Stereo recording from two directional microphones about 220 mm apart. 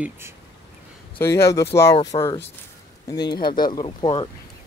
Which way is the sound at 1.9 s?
25° left (ahead or behind).